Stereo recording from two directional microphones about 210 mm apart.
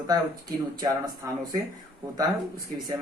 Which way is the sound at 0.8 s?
15° right (ahead or behind).